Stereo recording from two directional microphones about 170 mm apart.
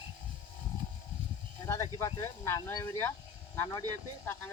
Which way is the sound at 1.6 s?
20° left (ahead or behind).